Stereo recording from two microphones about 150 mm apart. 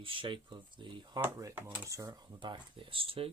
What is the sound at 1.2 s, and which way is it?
Speech, 15° right (ahead or behind).